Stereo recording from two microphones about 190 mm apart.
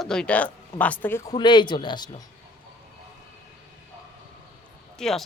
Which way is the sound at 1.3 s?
25° left (ahead or behind).